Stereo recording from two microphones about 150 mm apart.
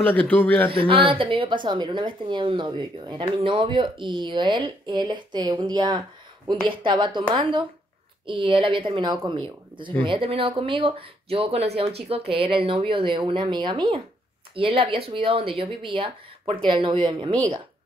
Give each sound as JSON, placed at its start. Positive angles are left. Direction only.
{"t": 0.0, "sound": "a man's voice", "side_deg": 10}
{"t": 0.7, "sound": "a woman's voice", "side_deg": -35}